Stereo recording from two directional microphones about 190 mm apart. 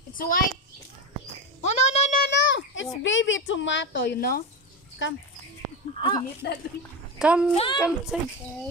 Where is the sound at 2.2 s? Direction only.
65° left (ahead or behind).